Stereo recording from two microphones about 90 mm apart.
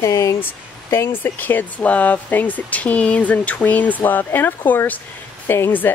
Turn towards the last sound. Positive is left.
turn(degrees=25)  # may be behind; listen again after turning